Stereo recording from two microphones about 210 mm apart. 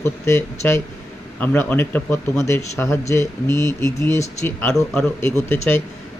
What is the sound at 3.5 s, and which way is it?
Speech, 20° right (ahead or behind).